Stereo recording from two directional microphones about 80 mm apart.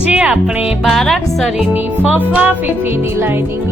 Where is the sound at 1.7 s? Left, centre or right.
Right.